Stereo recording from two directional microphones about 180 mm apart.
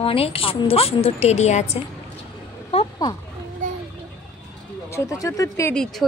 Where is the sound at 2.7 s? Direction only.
35° left (ahead or behind).